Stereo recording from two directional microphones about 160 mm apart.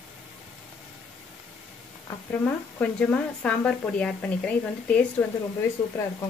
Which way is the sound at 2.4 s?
10° left (ahead or behind).